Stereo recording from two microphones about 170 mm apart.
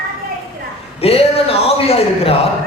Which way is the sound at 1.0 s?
35° left (ahead or behind).